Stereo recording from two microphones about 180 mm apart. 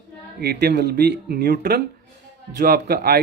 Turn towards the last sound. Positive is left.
turn(degrees=-60)  # may be behind; listen again after turning